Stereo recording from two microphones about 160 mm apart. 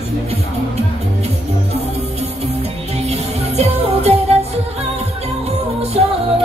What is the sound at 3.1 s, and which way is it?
Music, 40° right (ahead or behind).